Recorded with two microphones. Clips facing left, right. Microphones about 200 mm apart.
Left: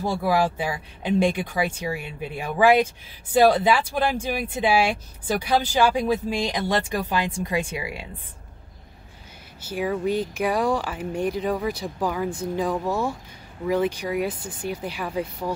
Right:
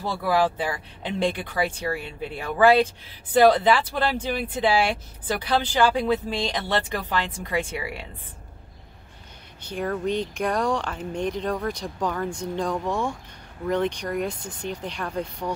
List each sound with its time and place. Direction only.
0.0 s speech: 15° left (ahead or behind)
9.7 s speech: 5° left (ahead or behind)